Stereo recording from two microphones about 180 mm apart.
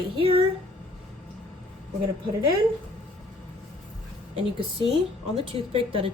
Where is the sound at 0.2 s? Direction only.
30° right (ahead or behind).